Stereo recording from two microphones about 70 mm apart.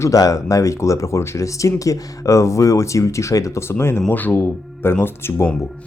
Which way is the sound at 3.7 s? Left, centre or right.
Left.